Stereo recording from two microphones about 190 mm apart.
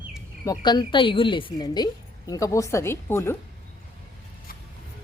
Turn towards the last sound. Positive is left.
turn(degrees=10)  # may be behind; listen again after turning